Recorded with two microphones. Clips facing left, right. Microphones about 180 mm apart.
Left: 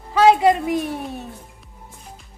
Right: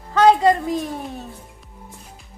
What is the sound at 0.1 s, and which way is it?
Speech, 10° left (ahead or behind).